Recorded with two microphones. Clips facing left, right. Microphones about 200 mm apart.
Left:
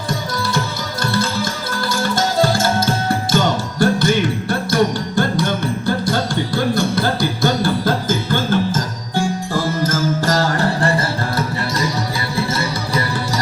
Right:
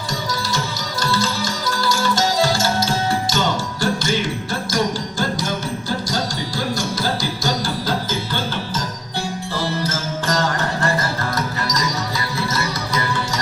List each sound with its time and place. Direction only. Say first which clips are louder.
0.3 s music: left 3 dB; 55° left (ahead or behind); by 13.4 s 35° left (ahead or behind)